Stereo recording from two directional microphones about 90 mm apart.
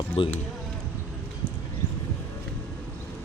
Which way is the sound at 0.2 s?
75° left (ahead or behind).